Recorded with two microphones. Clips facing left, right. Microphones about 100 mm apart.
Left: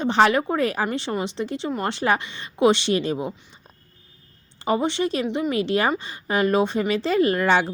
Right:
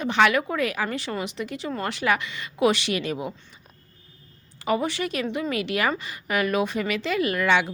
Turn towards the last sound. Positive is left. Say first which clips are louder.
# left 3 dB
turn(degrees=35)  # may be behind; listen again after turning